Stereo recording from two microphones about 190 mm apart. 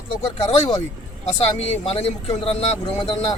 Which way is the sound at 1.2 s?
35° left (ahead or behind).